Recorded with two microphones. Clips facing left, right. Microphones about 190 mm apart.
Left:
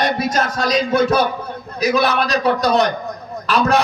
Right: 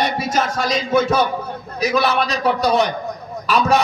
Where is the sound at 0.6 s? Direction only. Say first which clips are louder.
Left 3 dB; 60° left (ahead or behind).